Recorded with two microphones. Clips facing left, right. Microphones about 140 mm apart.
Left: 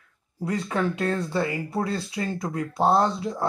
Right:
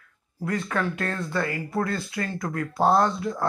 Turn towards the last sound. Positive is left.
turn(degrees=25)  # may be behind; listen again after turning